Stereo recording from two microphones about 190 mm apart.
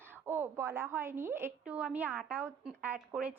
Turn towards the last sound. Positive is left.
turn(degrees=-5)  # may be behind; listen again after turning